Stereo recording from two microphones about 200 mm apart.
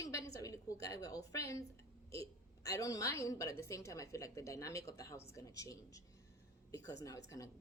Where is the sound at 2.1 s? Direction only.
15° left (ahead or behind).